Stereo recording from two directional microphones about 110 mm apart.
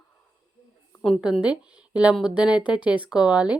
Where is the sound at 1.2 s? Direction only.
5° right (ahead or behind).